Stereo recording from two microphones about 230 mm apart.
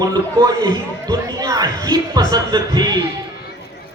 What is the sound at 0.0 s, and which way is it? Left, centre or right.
Speech, centre.